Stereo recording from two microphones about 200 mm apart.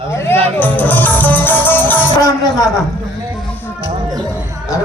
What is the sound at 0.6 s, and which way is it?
Music, 10° left (ahead or behind).